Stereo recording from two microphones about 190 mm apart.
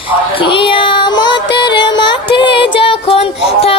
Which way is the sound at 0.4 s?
25° left (ahead or behind).